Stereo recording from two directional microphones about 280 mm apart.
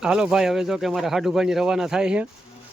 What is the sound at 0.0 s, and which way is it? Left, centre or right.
Speech, centre.